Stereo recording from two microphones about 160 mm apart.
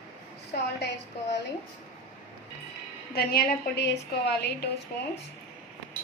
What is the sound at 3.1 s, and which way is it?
A woman's voice, 75° left (ahead or behind).